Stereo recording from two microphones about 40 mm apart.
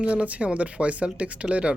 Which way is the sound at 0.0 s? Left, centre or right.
Right.